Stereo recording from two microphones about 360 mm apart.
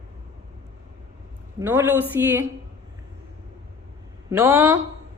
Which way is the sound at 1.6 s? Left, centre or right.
Centre.